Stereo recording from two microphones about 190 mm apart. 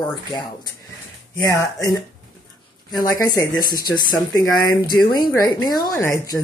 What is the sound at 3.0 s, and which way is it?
Speech, 20° left (ahead or behind).